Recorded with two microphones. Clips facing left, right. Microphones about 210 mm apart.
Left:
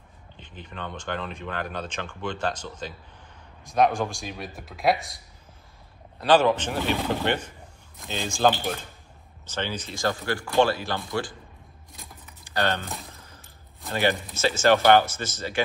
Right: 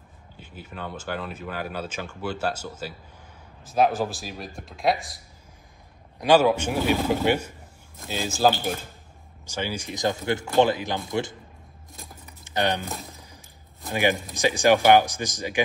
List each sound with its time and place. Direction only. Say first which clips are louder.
0.4 s speech: right 1 dB; 5° right (ahead or behind)
6.1 s speech: right 1 dB; 10° right (ahead or behind)
12.4 s speech: right 1 dB; 20° right (ahead or behind)
13.1 s a sound: right 2 dB; 15° right (ahead or behind)
13.8 s speech: right 1 dB; 15° right (ahead or behind)